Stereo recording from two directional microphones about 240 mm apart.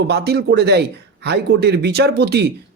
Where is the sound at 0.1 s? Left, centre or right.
Right.